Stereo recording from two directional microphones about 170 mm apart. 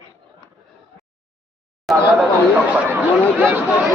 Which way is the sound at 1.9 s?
Centre (ahead or behind).